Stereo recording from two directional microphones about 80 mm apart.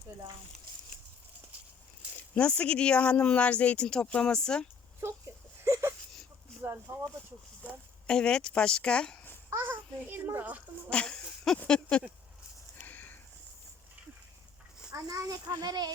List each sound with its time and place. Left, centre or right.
2.3 s speech: centre
5.6 s whimper: right
6.9 s speech: right
8.0 s speech: centre
9.5 s a child's voice: right
10.8 s speech: centre
12.8 s sniff: left
14.9 s a child's voice: right